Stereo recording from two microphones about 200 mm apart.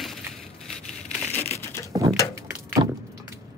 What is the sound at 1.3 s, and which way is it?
Typewriter, 10° left (ahead or behind).